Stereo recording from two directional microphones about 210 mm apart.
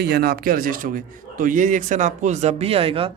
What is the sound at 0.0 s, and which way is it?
Speech, 50° right (ahead or behind).